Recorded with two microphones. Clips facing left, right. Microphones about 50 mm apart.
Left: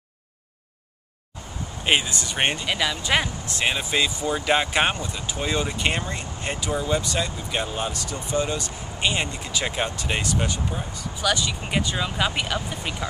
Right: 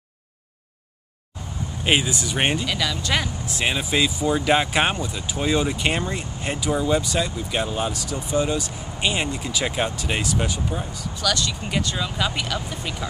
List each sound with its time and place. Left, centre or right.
1.9 s speech: centre
2.6 s speech: centre
3.4 s speech: centre
11.1 s speech: centre